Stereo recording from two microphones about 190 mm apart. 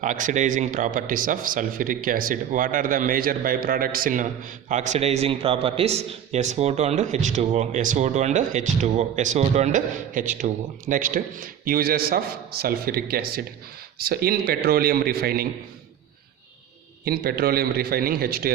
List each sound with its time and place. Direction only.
0.0 s speech: 40° right (ahead or behind)
17.1 s speech: 55° right (ahead or behind)